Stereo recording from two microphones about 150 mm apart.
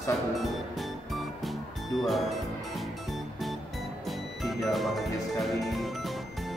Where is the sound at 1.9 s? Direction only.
Centre (ahead or behind).